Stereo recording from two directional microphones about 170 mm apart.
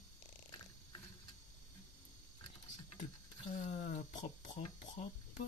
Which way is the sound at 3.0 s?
45° left (ahead or behind).